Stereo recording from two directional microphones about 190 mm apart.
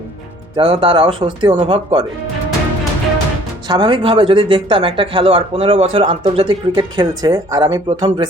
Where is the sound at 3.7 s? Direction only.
25° right (ahead or behind).